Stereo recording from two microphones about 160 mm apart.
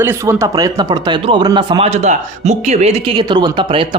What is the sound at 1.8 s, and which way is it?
Speech, 45° right (ahead or behind).